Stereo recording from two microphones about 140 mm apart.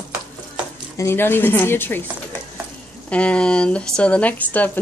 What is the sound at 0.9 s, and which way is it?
Speech, 15° left (ahead or behind).